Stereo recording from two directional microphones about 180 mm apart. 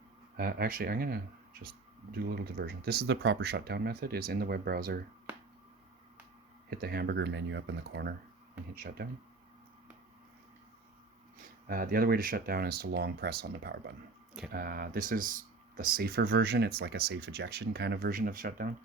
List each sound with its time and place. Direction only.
0.3 s speech: 55° right (ahead or behind)
6.7 s speech: 60° right (ahead or behind)
8.7 s speech: 55° right (ahead or behind)
11.3 s speech: 50° right (ahead or behind)